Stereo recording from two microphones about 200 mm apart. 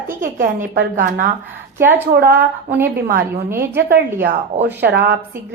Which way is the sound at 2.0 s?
50° right (ahead or behind).